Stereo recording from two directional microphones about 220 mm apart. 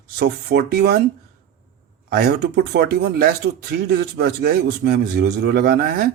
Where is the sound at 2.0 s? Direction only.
50° right (ahead or behind).